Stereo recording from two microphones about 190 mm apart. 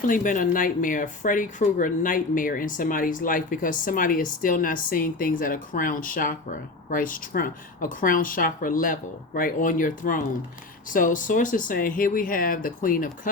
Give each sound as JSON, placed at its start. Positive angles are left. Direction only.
{"t": 0.1, "sound": "speech", "side_deg": 45}